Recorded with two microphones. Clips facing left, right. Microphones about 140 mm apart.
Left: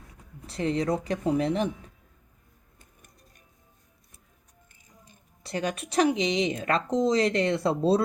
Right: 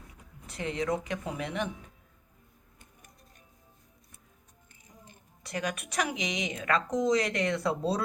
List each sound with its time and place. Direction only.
0.4 s speech: 35° left (ahead or behind)
5.4 s speech: 30° left (ahead or behind)